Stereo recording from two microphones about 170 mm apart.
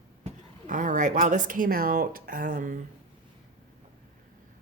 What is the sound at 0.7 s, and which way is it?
Speech, 45° right (ahead or behind).